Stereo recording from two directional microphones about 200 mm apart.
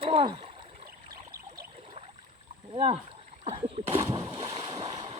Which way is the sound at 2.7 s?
30° right (ahead or behind).